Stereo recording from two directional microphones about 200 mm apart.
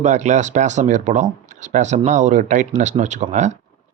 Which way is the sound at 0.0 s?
35° right (ahead or behind).